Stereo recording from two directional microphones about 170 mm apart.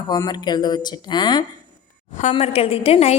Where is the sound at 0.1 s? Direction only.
25° left (ahead or behind).